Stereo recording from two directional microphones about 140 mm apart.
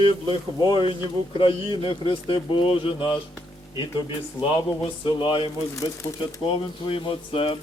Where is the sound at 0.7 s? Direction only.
35° left (ahead or behind).